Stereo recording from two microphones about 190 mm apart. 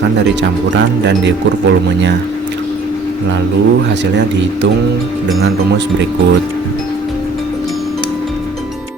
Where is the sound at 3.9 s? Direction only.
65° right (ahead or behind).